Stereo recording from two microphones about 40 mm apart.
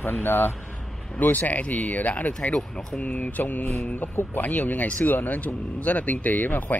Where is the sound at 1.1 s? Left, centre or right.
Left.